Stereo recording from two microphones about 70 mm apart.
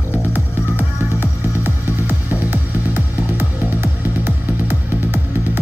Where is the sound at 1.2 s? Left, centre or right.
Right.